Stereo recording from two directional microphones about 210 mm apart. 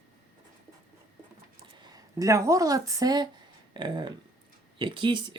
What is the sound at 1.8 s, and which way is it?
Speech, 15° right (ahead or behind).